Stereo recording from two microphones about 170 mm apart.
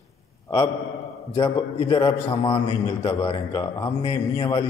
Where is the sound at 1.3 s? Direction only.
30° left (ahead or behind).